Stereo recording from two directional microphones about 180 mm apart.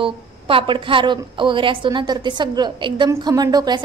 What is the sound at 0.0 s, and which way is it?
A woman's voice, 30° right (ahead or behind).